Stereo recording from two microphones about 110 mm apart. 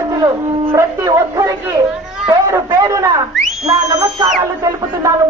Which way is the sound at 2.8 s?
30° right (ahead or behind).